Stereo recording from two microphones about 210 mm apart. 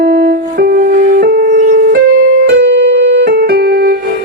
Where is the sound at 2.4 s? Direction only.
55° right (ahead or behind).